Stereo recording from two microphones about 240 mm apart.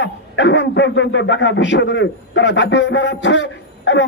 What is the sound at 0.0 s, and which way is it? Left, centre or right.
Speech, left.